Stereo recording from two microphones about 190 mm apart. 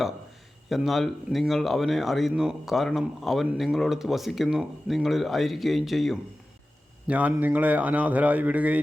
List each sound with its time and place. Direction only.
0.7 s speech: centre (ahead or behind)